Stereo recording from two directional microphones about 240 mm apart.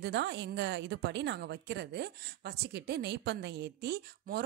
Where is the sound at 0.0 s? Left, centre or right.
Right.